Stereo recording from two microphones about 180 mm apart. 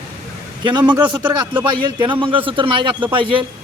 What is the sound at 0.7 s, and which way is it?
Speech, 25° right (ahead or behind).